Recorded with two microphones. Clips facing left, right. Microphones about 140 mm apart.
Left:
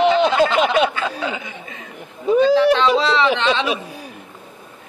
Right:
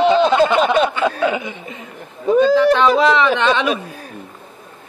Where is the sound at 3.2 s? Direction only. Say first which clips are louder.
Right 2 dB; 15° left (ahead or behind).